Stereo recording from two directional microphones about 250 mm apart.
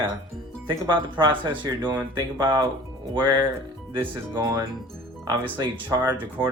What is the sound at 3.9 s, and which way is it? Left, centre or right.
Speech, centre.